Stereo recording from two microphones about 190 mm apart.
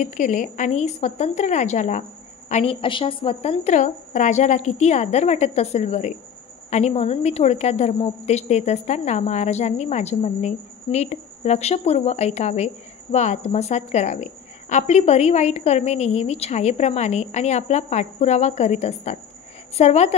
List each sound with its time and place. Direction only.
0.0 s a woman's voice: 40° left (ahead or behind)